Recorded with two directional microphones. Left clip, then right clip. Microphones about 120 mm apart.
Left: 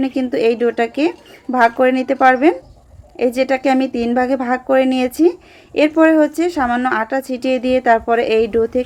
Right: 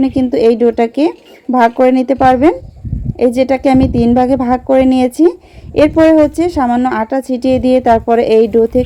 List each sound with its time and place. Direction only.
0.0 s speech: 50° right (ahead or behind)